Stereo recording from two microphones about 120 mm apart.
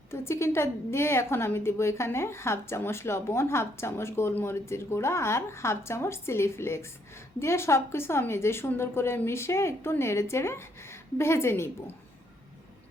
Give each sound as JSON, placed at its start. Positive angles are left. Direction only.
{"t": 0.1, "sound": "a woman's voice", "side_deg": 20}